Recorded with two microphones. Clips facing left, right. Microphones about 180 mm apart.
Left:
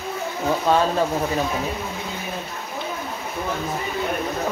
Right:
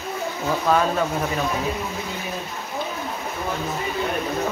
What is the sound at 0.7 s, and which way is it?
Speech, 30° left (ahead or behind).